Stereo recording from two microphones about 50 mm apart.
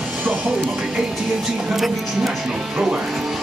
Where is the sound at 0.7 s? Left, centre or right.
Centre.